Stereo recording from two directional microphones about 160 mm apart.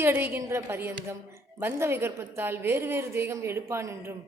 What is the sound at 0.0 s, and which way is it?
A woman's voice, 15° right (ahead or behind).